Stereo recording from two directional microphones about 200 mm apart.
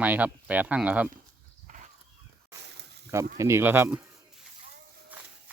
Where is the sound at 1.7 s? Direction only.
40° right (ahead or behind).